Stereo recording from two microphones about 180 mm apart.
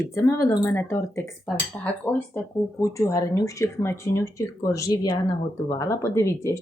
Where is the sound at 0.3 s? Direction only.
15° left (ahead or behind).